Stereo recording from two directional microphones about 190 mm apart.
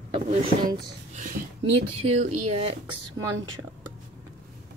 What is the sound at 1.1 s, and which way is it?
Speech, 45° right (ahead or behind).